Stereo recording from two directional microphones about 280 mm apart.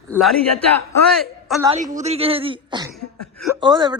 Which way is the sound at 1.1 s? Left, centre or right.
Centre.